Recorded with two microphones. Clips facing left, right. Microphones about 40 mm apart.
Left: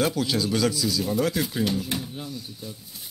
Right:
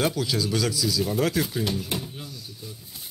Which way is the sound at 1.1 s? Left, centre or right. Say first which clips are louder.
Even; right.